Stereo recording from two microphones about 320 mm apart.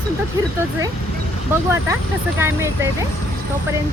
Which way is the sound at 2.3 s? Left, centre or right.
Centre.